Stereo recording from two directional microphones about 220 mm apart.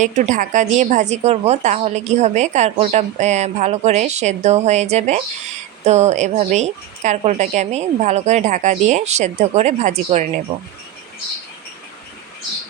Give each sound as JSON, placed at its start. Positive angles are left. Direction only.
{"t": 0.0, "sound": "a woman's voice", "side_deg": -35}